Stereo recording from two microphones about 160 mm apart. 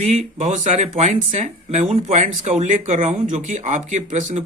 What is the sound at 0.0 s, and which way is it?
Speech, 45° right (ahead or behind).